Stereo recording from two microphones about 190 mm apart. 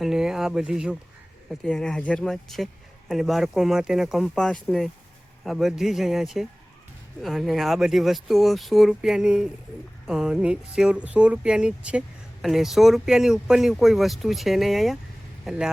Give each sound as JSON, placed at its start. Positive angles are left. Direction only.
{"t": 0.0, "sound": "speech", "side_deg": 0}